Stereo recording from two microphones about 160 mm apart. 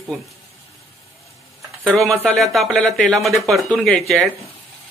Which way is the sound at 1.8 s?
Centre (ahead or behind).